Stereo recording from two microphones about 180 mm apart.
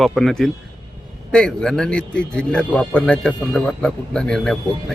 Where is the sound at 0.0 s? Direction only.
Centre (ahead or behind).